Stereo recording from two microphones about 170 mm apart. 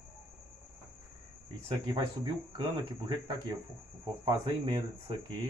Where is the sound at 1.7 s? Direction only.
25° right (ahead or behind).